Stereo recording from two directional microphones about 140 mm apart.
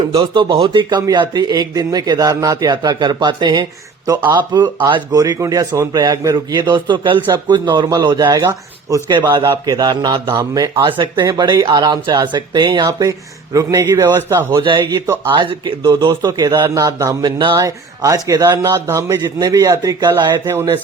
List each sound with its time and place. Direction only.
0.1 s a man's voice: 40° right (ahead or behind); by 14.4 s 20° right (ahead or behind)
14.5 s a man's voice: 35° right (ahead or behind)
17.6 s speech: 20° right (ahead or behind)
20.5 s speech: 20° right (ahead or behind)